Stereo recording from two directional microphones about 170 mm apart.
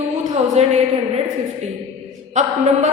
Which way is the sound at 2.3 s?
45° right (ahead or behind).